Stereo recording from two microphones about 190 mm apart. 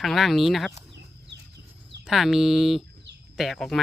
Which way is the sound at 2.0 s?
Centre (ahead or behind).